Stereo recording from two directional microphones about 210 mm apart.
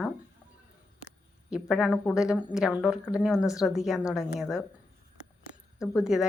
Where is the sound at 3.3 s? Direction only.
15° left (ahead or behind).